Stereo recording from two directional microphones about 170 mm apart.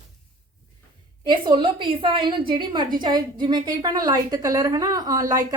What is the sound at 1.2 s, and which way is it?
A woman's voice, 25° right (ahead or behind).